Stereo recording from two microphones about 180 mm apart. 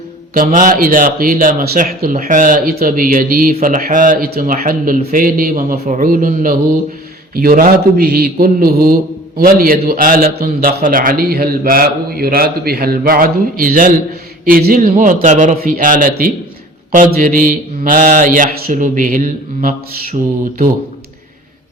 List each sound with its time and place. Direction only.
0.3 s a man's voice: 45° right (ahead or behind)